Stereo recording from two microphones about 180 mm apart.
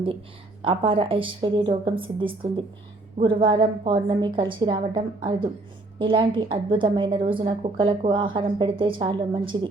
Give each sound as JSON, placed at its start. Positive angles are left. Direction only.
{"t": 0.6, "sound": "a woman's voice", "side_deg": -30}